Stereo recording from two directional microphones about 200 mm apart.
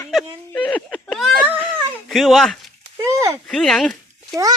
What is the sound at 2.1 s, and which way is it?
Speech, centre (ahead or behind).